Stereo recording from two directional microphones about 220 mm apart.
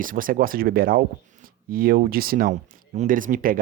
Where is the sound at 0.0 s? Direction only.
40° right (ahead or behind).